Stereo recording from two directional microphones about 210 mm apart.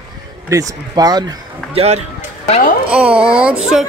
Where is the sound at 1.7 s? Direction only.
30° right (ahead or behind).